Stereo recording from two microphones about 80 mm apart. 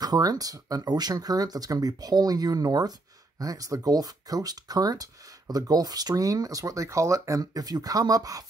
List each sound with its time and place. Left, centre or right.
0.0 s speech: right